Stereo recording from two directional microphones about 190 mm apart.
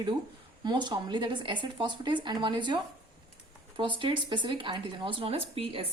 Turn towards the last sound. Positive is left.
turn(degrees=-30)  # may be behind; listen again after turning